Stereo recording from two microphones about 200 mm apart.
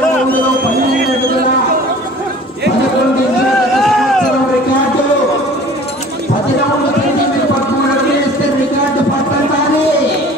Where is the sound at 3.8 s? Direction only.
Centre (ahead or behind).